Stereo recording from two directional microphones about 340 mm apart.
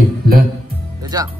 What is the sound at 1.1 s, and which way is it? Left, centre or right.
Speech, centre.